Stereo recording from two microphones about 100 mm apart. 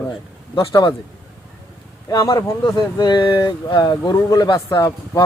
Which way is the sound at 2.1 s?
35° left (ahead or behind).